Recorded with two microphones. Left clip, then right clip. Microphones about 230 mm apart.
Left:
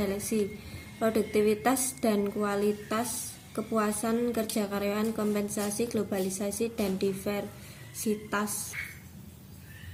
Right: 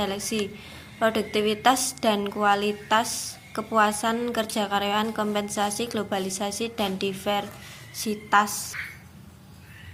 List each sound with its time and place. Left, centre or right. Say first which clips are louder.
0.0 s a woman's voice: right 3 dB; centre